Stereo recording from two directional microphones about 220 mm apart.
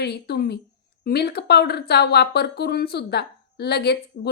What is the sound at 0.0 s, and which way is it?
Speech, 50° left (ahead or behind).